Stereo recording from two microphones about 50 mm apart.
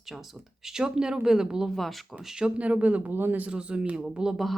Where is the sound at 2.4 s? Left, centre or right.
Right.